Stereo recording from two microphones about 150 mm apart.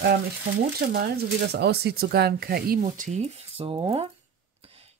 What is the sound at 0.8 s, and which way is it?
Speech, 90° right.